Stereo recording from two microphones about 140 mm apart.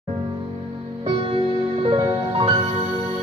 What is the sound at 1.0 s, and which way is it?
Music, 40° right (ahead or behind).